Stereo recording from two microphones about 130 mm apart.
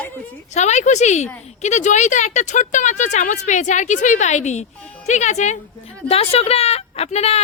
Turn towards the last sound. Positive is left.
turn(degrees=55)  # may be behind; listen again after turning